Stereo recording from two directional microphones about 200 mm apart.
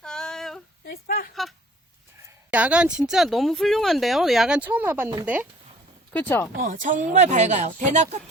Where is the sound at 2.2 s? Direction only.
5° right (ahead or behind).